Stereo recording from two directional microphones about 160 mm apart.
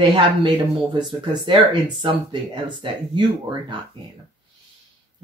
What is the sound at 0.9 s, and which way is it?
Speech, 30° right (ahead or behind).